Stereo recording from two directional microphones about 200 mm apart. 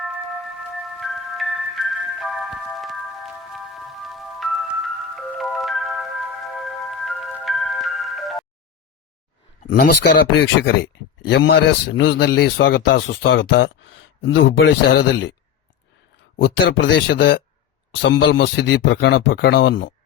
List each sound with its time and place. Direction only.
0.9 s music: centre (ahead or behind)
3.5 s glockenspiel: centre (ahead or behind)
9.6 s speech: 55° left (ahead or behind)
11.3 s speech: 60° left (ahead or behind)
13.1 s speech: 70° left (ahead or behind)
16.4 s speech: 65° left (ahead or behind)